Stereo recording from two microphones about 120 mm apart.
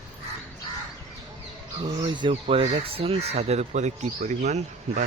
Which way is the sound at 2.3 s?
60° right (ahead or behind).